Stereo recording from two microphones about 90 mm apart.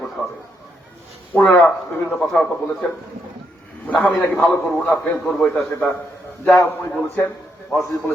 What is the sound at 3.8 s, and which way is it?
A man's voice, 15° left (ahead or behind).